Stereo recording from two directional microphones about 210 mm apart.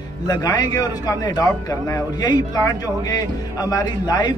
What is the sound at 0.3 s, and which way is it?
A man's voice, 15° left (ahead or behind).